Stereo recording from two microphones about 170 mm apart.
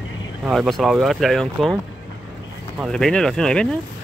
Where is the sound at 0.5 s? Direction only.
Centre (ahead or behind).